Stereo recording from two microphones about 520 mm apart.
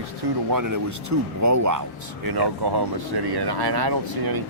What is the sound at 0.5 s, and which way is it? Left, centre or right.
Speech, right.